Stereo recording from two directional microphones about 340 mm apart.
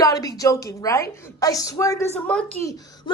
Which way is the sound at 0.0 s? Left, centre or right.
Centre.